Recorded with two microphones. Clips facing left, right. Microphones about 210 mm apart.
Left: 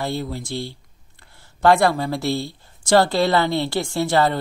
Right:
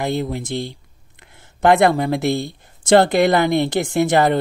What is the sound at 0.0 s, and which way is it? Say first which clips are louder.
Speech: right 4 dB; 20° right (ahead or behind).